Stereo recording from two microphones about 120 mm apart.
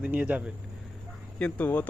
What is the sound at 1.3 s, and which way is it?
Speech, 15° left (ahead or behind).